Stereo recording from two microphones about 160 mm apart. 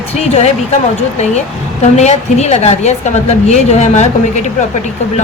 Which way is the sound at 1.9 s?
45° left (ahead or behind).